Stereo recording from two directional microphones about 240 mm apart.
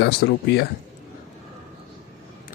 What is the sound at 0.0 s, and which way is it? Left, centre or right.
Speech, left.